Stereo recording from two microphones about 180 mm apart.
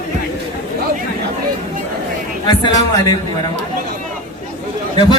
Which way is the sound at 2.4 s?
20° left (ahead or behind).